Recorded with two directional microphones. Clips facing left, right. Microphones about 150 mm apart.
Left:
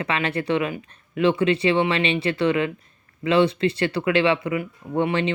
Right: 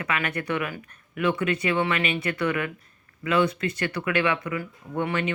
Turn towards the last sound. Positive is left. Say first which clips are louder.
# left 5 dB
turn(degrees=25)  # may be behind; listen again after turning